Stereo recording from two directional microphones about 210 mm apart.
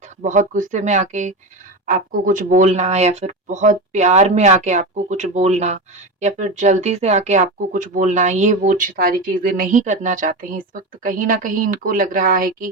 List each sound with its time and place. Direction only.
0.2 s speech: 35° right (ahead or behind)